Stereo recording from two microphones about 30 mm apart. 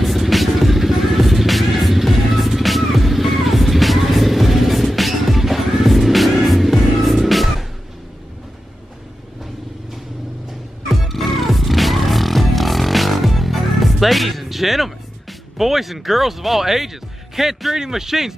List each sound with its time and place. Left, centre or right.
0.0 s vehicle: centre
11.1 s music: centre
15.5 s a man's voice: centre